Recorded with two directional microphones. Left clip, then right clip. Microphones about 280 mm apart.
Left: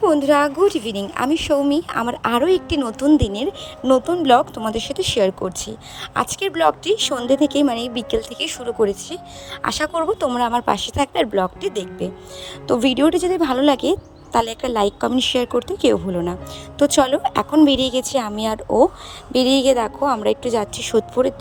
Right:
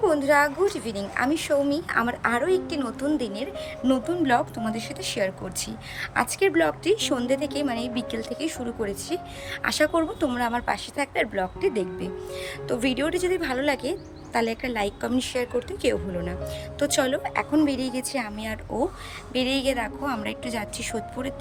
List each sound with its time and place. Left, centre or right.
0.0 s a woman's voice: left